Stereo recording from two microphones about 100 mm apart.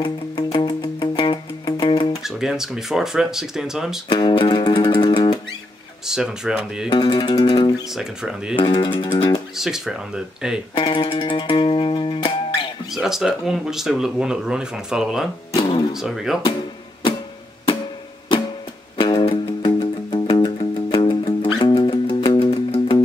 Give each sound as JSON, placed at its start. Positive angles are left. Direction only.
{"t": 0.0, "sound": "music", "side_deg": 45}
{"t": 2.2, "sound": "speech", "side_deg": -5}
{"t": 4.1, "sound": "music", "side_deg": 55}
{"t": 6.0, "sound": "speech", "side_deg": -5}
{"t": 6.9, "sound": "music", "side_deg": 50}
{"t": 7.9, "sound": "speech", "side_deg": -5}
{"t": 8.5, "sound": "music", "side_deg": 50}
{"t": 9.6, "sound": "speech", "side_deg": -5}
{"t": 10.8, "sound": "music", "side_deg": 55}
{"t": 12.9, "sound": "speech", "side_deg": -5}
{"t": 15.5, "sound": "speech", "side_deg": 55}
{"t": 15.9, "sound": "speech", "side_deg": -5}
{"t": 18.9, "sound": "music", "side_deg": 55}
{"t": 20.5, "sound": "music", "side_deg": 60}